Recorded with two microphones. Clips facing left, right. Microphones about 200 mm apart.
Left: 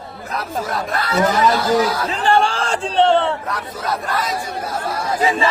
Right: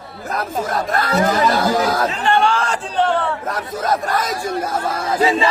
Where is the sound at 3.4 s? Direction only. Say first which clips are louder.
Right 3 dB; 45° right (ahead or behind).